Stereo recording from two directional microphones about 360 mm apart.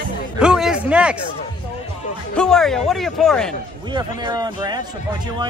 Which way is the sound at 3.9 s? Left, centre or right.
Centre.